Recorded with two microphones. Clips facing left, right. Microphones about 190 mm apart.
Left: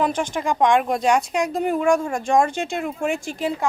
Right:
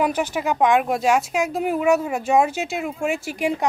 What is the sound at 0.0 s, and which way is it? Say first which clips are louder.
Speech: right 1 dB; 10° right (ahead or behind).